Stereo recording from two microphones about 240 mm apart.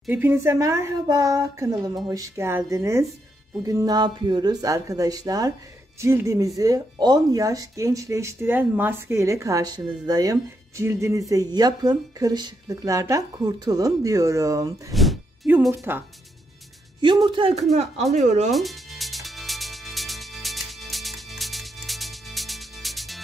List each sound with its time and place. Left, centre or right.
0.0 s speech: centre
14.9 s music: centre
17.0 s speech: centre
18.5 s music: centre